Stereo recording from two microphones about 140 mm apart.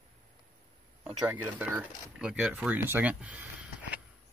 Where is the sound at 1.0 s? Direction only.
15° right (ahead or behind).